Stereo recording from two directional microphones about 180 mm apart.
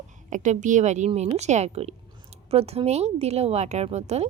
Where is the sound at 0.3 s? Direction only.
45° right (ahead or behind).